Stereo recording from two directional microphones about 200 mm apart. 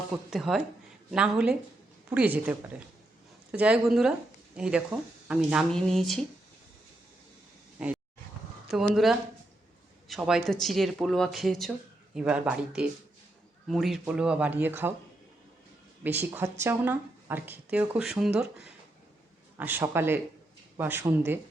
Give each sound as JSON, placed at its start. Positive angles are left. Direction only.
{"t": 0.3, "sound": "speech", "side_deg": 0}
{"t": 8.7, "sound": "speech", "side_deg": 0}
{"t": 16.0, "sound": "speech", "side_deg": -10}
{"t": 19.5, "sound": "speech", "side_deg": -10}